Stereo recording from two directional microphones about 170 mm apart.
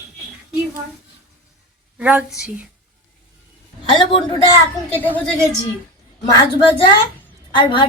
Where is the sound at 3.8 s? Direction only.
25° left (ahead or behind).